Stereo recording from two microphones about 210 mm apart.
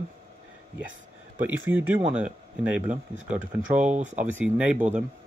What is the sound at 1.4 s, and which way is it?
Speech, 10° right (ahead or behind).